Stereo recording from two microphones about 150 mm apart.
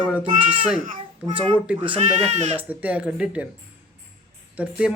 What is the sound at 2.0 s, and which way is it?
Speech, 50° right (ahead or behind).